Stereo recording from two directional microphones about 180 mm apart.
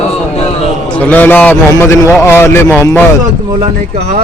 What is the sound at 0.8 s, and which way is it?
A man's voice, 10° left (ahead or behind).